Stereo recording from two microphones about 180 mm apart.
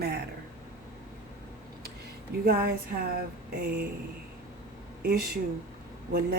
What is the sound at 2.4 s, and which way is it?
Speech, 60° right (ahead or behind).